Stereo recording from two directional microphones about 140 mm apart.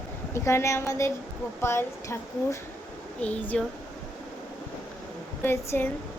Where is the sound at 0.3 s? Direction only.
20° left (ahead or behind).